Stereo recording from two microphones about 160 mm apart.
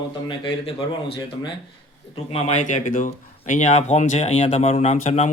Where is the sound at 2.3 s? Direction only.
45° left (ahead or behind).